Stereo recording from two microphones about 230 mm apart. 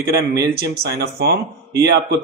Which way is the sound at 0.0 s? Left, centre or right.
Right.